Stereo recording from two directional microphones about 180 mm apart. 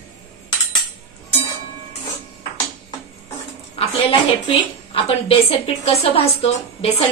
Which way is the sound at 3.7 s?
30° left (ahead or behind).